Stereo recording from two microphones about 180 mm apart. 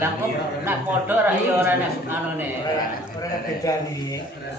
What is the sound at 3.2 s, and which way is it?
Speech, 20° left (ahead or behind).